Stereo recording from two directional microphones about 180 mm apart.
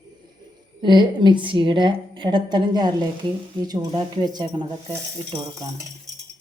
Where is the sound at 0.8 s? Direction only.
25° right (ahead or behind).